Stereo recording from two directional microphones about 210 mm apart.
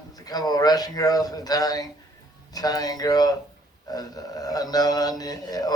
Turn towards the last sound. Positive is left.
turn(degrees=20)  # may be behind; listen again after turning